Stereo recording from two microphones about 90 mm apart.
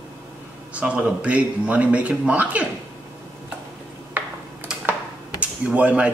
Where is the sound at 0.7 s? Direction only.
15° right (ahead or behind).